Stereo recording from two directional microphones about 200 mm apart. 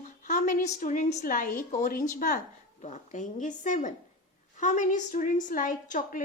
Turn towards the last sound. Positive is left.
turn(degrees=40)  # may be behind; listen again after turning